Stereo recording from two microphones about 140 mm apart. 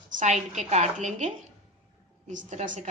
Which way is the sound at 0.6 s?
55° right (ahead or behind).